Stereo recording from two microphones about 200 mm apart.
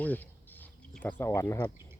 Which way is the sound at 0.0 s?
10° left (ahead or behind).